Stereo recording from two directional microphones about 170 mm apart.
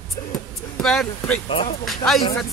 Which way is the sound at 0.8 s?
5° left (ahead or behind).